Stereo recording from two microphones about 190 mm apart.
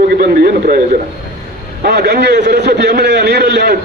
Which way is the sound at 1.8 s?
60° right (ahead or behind).